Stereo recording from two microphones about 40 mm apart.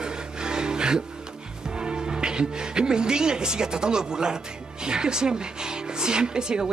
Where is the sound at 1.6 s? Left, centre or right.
Right.